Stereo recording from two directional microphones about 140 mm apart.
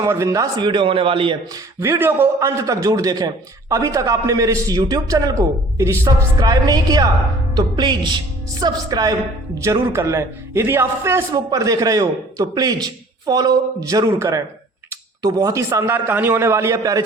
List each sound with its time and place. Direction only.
0.0 s a man's voice: 20° right (ahead or behind); by 1.4 s 40° right (ahead or behind)
1.8 s a man's voice: 15° right (ahead or behind)